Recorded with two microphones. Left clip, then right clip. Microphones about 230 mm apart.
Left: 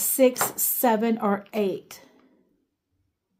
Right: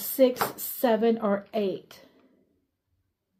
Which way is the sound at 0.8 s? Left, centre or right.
Left.